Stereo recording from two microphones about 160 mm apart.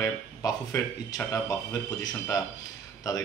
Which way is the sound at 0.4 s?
20° left (ahead or behind).